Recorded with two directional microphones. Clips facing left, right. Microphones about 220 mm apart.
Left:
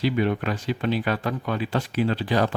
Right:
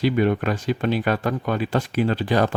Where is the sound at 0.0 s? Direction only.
50° right (ahead or behind).